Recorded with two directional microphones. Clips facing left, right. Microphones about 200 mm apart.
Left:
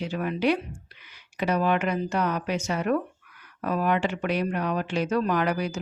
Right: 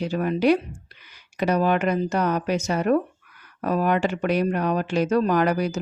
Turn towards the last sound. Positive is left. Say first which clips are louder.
# right 4 dB
turn(degrees=-45)  # may be behind; listen again after turning